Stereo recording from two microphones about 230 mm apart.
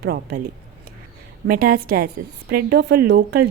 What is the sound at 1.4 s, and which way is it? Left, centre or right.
A woman's voice, right.